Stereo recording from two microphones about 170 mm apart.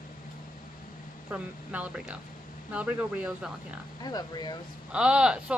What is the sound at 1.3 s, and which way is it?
Speech, 10° right (ahead or behind).